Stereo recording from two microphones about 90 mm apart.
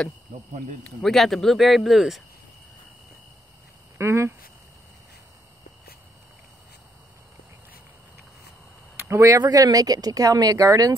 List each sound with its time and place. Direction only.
1.0 s speech: 5° left (ahead or behind)
4.0 s speech: 30° right (ahead or behind)
9.1 s speech: 35° right (ahead or behind)